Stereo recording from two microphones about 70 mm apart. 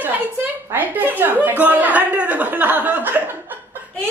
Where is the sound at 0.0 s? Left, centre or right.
Right.